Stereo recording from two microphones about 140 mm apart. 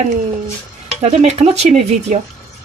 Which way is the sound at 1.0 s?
50° right (ahead or behind).